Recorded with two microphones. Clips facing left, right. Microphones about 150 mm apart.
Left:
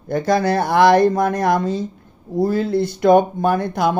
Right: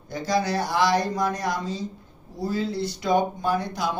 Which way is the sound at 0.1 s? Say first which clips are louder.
Left 7 dB; 55° left (ahead or behind).